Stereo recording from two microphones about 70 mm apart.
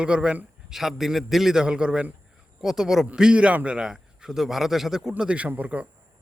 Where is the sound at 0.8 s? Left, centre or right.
Centre.